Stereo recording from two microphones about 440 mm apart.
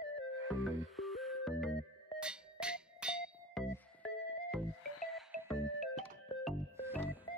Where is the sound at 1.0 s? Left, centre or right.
Centre.